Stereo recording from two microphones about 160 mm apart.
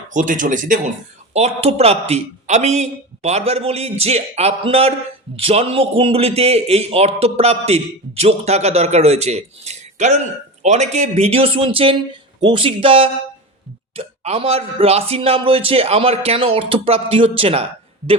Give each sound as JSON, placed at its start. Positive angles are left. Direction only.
{"t": 0.1, "sound": "speech", "side_deg": -55}
{"t": 1.3, "sound": "a man's voice", "side_deg": -40}